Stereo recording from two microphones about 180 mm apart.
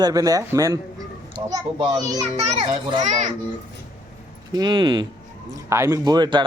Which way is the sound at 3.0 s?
45° right (ahead or behind).